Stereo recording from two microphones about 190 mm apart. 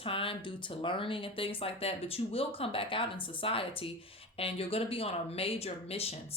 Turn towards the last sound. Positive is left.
turn(degrees=30)  # may be behind; listen again after turning